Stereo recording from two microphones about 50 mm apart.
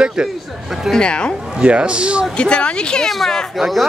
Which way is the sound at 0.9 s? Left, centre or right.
Centre.